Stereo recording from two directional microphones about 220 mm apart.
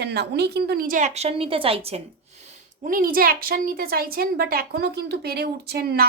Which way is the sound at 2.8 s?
40° right (ahead or behind).